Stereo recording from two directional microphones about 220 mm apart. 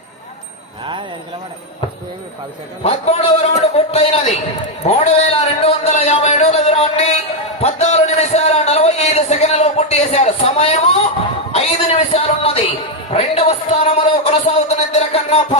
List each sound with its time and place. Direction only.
2.8 s a man's voice: 30° left (ahead or behind)